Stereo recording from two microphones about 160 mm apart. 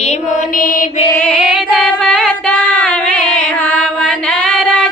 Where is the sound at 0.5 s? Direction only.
60° left (ahead or behind).